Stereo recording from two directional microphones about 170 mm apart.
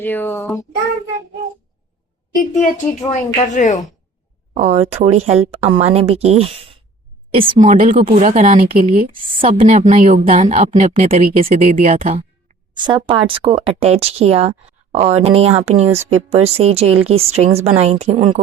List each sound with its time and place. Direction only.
0.0 s speech: 10° left (ahead or behind)
3.1 s speech: 45° left (ahead or behind)
4.5 s speech: 40° right (ahead or behind)
7.7 s speech: 50° right (ahead or behind)
8.6 s speech: 55° right (ahead or behind)
9.5 s speech: 35° right (ahead or behind); by 11.9 s 50° right (ahead or behind)
11.9 s speech: 40° right (ahead or behind)
12.7 s speech: 30° right (ahead or behind)